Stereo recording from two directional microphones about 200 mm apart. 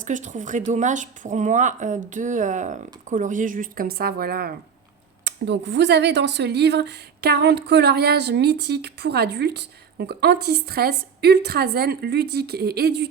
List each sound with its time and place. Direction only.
0.0 s speech: 40° right (ahead or behind)
5.2 s speech: 60° right (ahead or behind)